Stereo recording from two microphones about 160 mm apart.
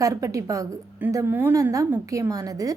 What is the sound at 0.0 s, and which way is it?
A woman's voice, 20° right (ahead or behind).